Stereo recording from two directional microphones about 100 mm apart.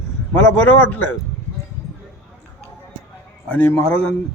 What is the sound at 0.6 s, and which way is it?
Speech, 15° left (ahead or behind).